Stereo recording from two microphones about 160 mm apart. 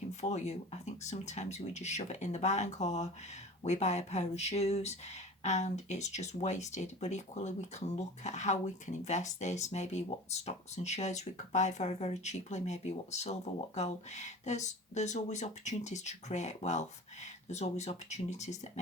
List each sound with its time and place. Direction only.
0.1 s speech: 45° left (ahead or behind)